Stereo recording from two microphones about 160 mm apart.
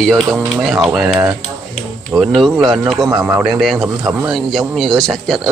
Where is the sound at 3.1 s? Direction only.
20° right (ahead or behind).